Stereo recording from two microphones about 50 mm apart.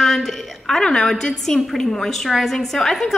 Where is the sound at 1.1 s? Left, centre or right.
Centre.